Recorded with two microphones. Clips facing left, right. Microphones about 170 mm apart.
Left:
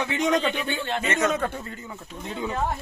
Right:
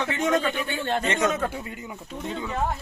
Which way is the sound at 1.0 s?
15° right (ahead or behind).